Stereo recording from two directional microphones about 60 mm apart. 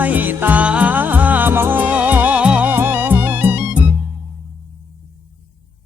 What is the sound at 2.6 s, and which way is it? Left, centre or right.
Music, right.